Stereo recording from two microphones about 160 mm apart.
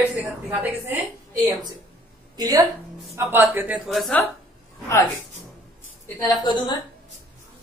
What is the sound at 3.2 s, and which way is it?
A woman's voice, 15° right (ahead or behind).